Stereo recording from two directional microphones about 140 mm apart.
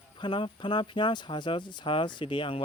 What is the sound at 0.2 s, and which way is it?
Speech, 35° left (ahead or behind).